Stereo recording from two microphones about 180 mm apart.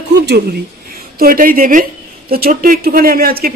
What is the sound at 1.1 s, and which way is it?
Speech, 50° right (ahead or behind).